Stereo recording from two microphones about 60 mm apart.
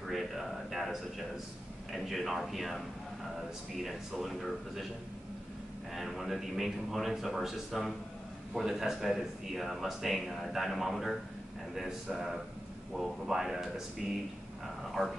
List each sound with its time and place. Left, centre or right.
0.0 s a sound: centre
1.9 s speech: centre
5.9 s speech: centre